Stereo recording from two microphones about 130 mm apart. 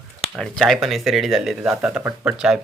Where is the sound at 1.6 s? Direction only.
10° right (ahead or behind).